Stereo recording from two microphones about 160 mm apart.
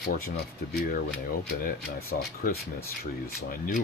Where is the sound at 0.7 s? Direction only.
60° left (ahead or behind).